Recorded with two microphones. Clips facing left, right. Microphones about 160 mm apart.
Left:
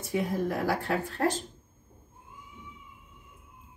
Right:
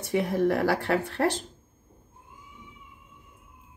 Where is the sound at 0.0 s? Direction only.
70° right (ahead or behind).